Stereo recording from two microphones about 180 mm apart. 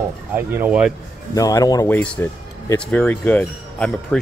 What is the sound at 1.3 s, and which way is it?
Speech, 20° left (ahead or behind).